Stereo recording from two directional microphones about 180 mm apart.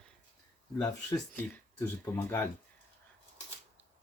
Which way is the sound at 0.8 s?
15° left (ahead or behind).